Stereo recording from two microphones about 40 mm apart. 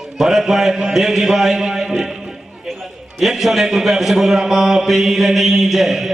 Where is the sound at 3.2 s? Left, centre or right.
Centre.